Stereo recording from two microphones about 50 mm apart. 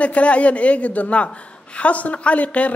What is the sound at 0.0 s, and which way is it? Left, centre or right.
A man's voice, left.